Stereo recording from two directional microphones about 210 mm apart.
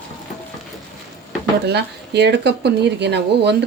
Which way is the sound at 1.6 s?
50° right (ahead or behind).